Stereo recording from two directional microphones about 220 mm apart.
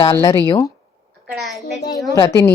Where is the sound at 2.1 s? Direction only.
15° left (ahead or behind).